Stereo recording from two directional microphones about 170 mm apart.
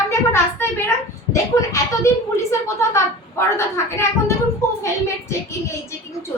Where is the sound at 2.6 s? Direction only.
15° left (ahead or behind).